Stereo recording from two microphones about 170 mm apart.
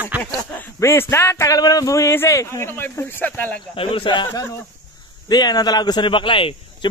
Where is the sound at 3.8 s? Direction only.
30° left (ahead or behind).